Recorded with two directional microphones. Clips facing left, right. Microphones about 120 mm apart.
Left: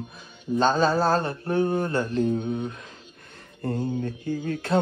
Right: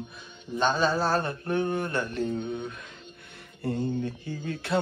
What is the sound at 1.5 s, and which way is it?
Speech, 35° left (ahead or behind).